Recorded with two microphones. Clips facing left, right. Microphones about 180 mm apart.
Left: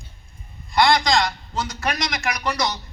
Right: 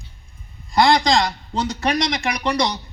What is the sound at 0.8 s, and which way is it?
A man's voice, 35° right (ahead or behind).